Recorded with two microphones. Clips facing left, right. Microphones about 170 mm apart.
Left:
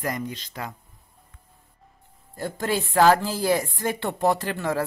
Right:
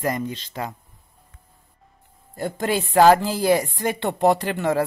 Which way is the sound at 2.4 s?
15° right (ahead or behind).